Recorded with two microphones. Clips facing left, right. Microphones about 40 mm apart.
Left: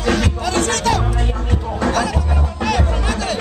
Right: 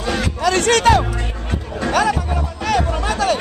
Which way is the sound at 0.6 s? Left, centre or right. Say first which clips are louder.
Right 4 dB; right.